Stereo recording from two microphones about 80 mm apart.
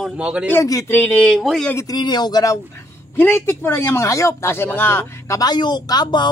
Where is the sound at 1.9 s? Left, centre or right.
Left.